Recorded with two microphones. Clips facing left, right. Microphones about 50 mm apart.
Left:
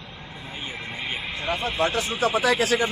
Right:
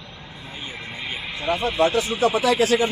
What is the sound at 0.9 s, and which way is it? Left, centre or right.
Vehicle, centre.